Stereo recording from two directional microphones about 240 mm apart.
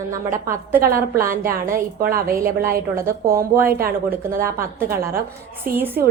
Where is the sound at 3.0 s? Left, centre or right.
Centre.